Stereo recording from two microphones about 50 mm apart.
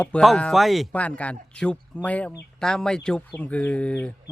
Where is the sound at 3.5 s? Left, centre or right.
Left.